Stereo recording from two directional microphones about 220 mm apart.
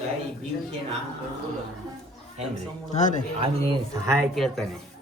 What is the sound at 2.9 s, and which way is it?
Speech, 35° left (ahead or behind).